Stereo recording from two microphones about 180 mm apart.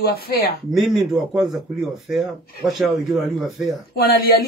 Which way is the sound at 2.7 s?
Centre (ahead or behind).